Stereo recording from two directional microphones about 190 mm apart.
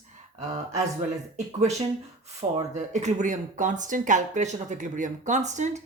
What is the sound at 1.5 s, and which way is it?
Speech, 35° right (ahead or behind).